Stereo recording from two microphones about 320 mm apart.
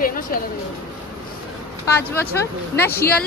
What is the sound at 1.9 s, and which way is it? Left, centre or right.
Speech, centre.